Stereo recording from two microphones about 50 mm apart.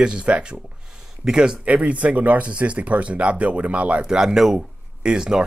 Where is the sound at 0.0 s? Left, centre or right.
Centre.